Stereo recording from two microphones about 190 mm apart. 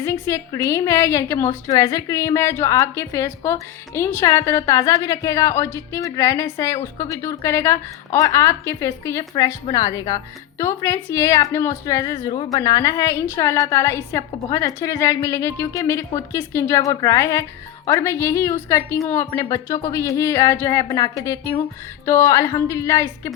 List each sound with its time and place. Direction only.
0.0 s a woman's voice: 15° left (ahead or behind)